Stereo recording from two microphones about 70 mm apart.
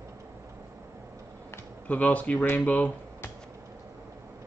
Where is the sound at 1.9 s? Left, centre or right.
Left.